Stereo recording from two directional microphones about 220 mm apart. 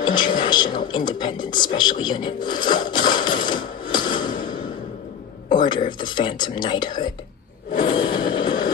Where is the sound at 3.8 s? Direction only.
20° left (ahead or behind).